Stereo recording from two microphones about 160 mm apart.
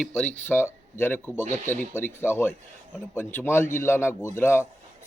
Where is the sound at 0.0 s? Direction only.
5° left (ahead or behind).